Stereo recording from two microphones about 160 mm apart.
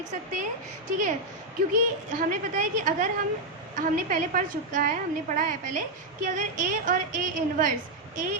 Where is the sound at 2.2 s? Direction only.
55° right (ahead or behind).